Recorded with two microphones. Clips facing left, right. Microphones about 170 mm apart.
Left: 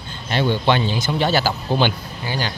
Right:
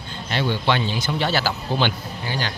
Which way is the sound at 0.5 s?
20° left (ahead or behind).